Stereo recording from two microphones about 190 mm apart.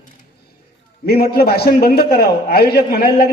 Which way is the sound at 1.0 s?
55° left (ahead or behind).